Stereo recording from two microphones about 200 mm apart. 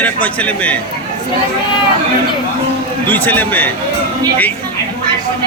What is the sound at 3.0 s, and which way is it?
Speech, 10° left (ahead or behind).